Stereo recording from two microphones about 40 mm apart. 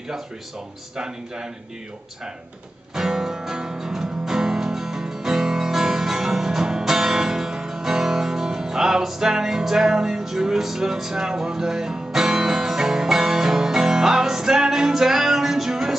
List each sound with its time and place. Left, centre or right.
0.9 s speech: centre
2.9 s music: centre